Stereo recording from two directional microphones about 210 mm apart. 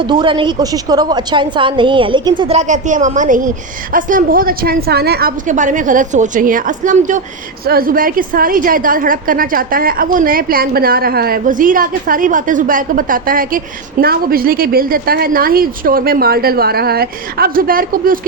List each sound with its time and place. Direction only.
0.0 s a woman's voice: 25° right (ahead or behind); by 18.2 s 40° right (ahead or behind)